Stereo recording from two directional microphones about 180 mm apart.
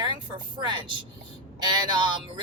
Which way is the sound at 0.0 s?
25° right (ahead or behind).